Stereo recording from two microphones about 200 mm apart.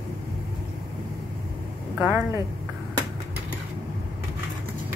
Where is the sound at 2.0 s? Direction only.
10° right (ahead or behind).